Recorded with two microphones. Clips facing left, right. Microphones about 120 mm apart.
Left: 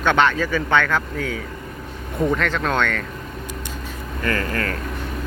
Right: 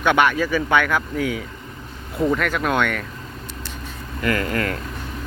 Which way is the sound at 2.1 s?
Centre (ahead or behind).